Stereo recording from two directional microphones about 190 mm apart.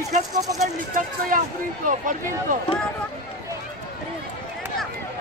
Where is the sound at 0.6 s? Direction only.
45° right (ahead or behind).